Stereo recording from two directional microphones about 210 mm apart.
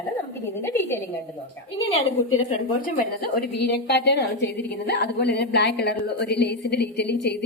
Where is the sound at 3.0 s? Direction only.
45° left (ahead or behind).